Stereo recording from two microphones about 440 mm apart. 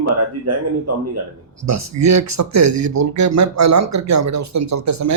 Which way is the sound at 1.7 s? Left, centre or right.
Right.